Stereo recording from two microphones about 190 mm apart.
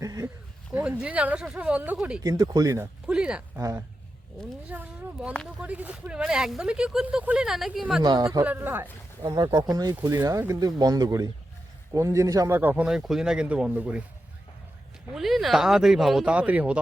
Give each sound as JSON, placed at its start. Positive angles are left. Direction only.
{"t": 0.0, "sound": "a sound", "side_deg": -20}
{"t": 0.7, "sound": "a man's voice", "side_deg": -10}
{"t": 2.2, "sound": "a man's voice", "side_deg": -20}
{"t": 3.6, "sound": "a man's voice", "side_deg": -15}
{"t": 4.7, "sound": "a sound", "side_deg": -10}
{"t": 5.3, "sound": "speech", "side_deg": 5}
{"t": 5.6, "sound": "speech", "side_deg": -5}
{"t": 8.0, "sound": "a man's voice", "side_deg": -20}
{"t": 9.3, "sound": "a man's voice", "side_deg": -25}
{"t": 15.1, "sound": "speech", "side_deg": 0}